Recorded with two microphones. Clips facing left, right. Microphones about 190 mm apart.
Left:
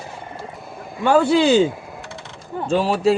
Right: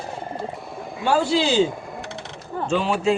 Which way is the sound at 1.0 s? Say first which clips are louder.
Left 5 dB; 55° left (ahead or behind).